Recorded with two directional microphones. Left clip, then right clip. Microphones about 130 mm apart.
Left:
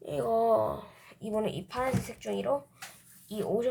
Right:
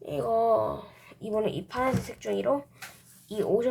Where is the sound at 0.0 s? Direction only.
15° left (ahead or behind); by 2.0 s 15° right (ahead or behind).